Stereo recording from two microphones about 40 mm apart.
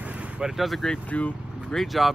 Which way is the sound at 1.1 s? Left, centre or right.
Left.